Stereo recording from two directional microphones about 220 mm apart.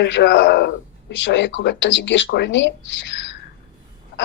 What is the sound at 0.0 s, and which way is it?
A man's voice, 50° left (ahead or behind).